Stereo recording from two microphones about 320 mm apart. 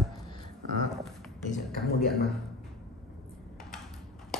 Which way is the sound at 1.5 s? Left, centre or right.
Left.